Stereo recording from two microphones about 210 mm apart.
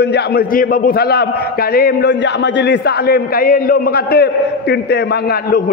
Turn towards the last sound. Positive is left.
turn(degrees=50)  # may be behind; listen again after turning